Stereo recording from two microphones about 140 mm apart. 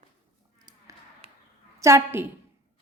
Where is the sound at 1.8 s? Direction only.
20° right (ahead or behind).